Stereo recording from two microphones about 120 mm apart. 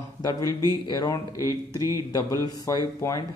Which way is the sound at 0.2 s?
30° left (ahead or behind).